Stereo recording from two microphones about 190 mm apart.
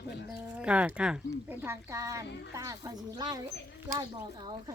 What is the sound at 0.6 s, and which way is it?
Speech, 5° right (ahead or behind).